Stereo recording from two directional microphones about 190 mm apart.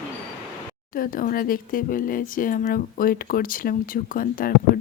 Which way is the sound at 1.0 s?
50° left (ahead or behind).